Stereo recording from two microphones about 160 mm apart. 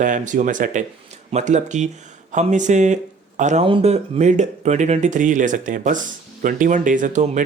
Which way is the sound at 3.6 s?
35° right (ahead or behind).